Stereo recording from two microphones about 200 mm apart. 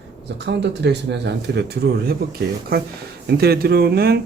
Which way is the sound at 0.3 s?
60° right (ahead or behind).